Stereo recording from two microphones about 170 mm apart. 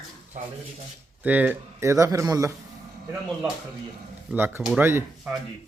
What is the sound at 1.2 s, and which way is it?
Speech, 10° right (ahead or behind).